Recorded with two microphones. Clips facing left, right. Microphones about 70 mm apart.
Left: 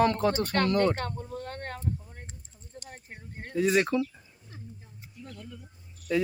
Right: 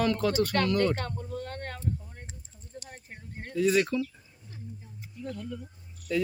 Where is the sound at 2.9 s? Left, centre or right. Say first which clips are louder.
Even; centre.